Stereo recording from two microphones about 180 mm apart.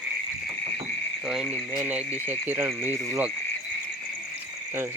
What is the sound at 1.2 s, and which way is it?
Frog, centre (ahead or behind).